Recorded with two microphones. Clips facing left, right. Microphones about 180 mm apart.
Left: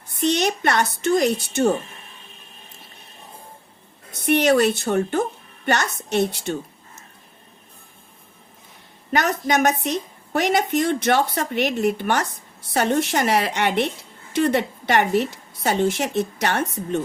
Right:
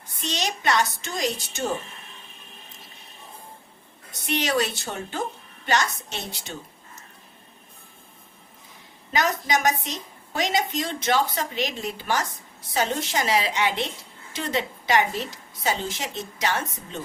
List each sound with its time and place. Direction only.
0.2 s a woman's voice: 60° left (ahead or behind)
4.3 s a woman's voice: 55° left (ahead or behind)
9.1 s a woman's voice: 60° left (ahead or behind)